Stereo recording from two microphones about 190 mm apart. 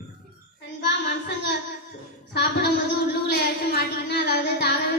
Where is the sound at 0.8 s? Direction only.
65° left (ahead or behind).